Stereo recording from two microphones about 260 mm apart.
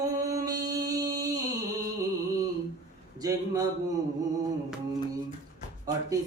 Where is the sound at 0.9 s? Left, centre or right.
Centre.